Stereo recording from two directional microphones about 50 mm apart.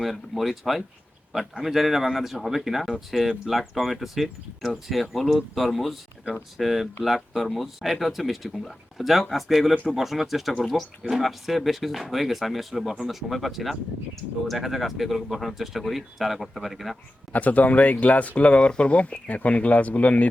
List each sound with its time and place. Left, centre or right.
0.0 s speech: centre
17.3 s speech: left